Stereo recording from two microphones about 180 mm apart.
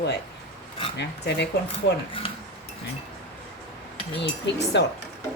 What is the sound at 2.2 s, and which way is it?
Speech, 30° left (ahead or behind).